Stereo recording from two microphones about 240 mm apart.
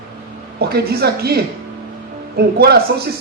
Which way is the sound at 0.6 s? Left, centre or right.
Right.